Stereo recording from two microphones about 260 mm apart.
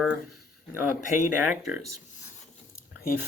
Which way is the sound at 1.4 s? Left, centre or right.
Centre.